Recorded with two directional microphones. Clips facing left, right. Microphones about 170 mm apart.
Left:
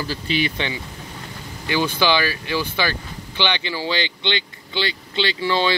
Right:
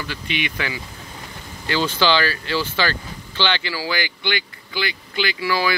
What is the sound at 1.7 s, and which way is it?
Speech, 15° left (ahead or behind).